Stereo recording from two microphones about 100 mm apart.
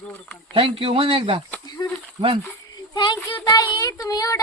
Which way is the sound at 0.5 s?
65° right (ahead or behind).